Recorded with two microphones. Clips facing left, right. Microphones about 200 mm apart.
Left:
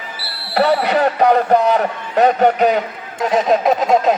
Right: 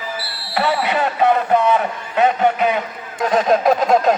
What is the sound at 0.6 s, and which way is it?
A man's voice, 40° left (ahead or behind).